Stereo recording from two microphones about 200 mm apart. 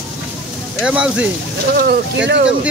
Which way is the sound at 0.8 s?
5° right (ahead or behind).